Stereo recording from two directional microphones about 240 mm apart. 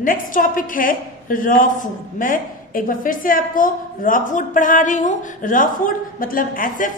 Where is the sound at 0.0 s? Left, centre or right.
Left.